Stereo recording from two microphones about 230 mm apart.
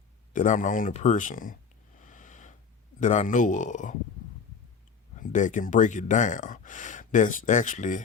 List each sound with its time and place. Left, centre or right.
0.3 s speech: left
2.0 s a sound: left
3.0 s speech: left
5.1 s speech: left